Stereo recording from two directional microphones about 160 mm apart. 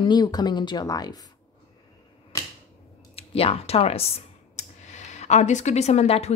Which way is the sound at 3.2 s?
35° left (ahead or behind).